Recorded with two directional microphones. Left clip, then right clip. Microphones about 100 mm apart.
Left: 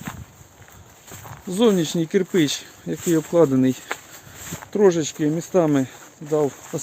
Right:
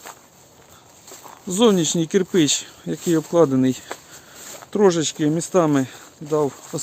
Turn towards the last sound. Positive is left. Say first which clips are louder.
# even
turn(degrees=-5)  # may be behind; listen again after turning